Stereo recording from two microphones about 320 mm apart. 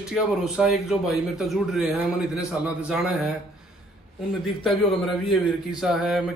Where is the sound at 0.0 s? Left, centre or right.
Centre.